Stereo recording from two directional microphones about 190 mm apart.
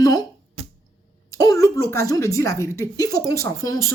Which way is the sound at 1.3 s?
15° left (ahead or behind).